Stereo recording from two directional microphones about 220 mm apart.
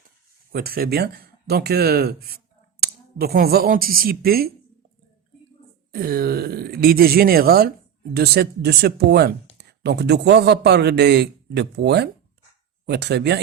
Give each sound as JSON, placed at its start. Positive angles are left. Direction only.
{"t": 0.5, "sound": "a man's voice", "side_deg": -45}
{"t": 5.9, "sound": "a man's voice", "side_deg": -40}